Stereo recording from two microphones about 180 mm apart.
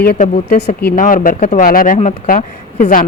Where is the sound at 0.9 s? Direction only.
50° left (ahead or behind).